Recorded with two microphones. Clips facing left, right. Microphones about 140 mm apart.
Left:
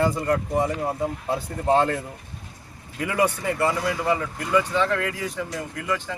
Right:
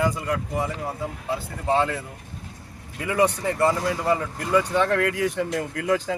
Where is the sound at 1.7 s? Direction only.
Centre (ahead or behind).